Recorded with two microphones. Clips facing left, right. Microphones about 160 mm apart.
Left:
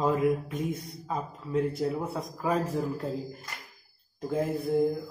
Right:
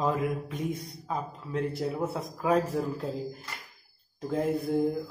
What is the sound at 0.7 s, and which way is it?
A man's voice, centre (ahead or behind).